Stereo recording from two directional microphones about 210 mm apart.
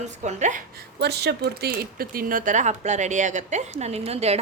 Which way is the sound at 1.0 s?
50° right (ahead or behind).